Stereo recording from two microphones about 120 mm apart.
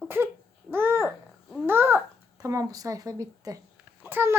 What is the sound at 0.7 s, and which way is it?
Babbling, 20° right (ahead or behind).